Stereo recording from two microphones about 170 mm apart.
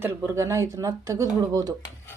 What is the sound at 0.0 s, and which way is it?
A woman's voice, 15° right (ahead or behind).